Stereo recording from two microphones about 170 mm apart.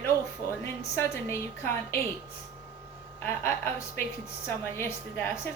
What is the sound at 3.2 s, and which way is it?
A woman's voice, 15° left (ahead or behind).